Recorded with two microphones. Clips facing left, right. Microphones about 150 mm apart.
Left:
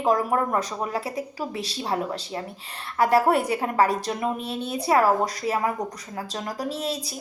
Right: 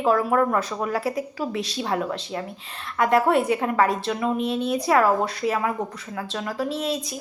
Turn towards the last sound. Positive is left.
turn(degrees=35)  # may be behind; listen again after turning